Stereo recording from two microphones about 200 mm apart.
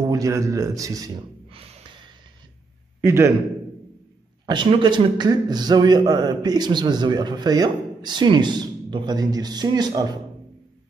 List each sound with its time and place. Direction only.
0.0 s a man's voice: 15° right (ahead or behind)
3.0 s a man's voice: 15° right (ahead or behind)
4.5 s a man's voice: 25° right (ahead or behind)